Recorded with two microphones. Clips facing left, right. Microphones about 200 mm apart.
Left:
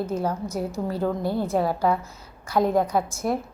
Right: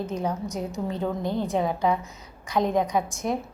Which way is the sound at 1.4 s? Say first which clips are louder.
Left 1 dB; 15° right (ahead or behind).